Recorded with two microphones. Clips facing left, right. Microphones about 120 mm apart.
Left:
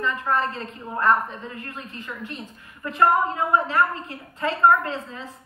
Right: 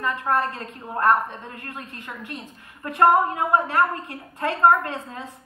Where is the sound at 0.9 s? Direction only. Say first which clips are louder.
Right 1 dB; 55° right (ahead or behind).